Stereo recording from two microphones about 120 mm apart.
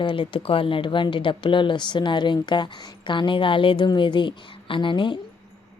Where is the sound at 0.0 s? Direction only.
45° left (ahead or behind).